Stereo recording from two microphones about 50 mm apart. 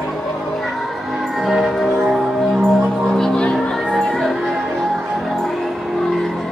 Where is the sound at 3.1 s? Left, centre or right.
Centre.